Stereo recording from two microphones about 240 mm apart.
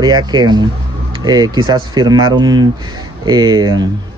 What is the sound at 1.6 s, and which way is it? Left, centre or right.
Speech, centre.